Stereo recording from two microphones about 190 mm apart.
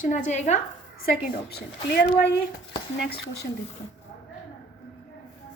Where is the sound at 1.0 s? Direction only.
50° left (ahead or behind).